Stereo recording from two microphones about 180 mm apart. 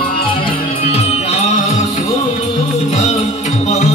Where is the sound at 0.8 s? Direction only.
35° left (ahead or behind).